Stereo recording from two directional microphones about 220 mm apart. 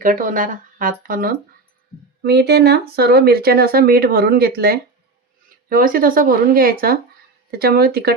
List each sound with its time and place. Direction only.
0.0 s speech: 40° right (ahead or behind)